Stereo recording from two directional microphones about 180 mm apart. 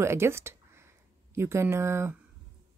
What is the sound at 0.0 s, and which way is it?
Speech, 15° right (ahead or behind).